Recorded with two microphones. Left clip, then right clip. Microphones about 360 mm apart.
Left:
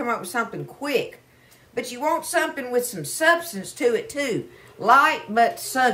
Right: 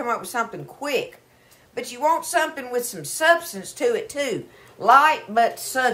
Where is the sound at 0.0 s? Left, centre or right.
Centre.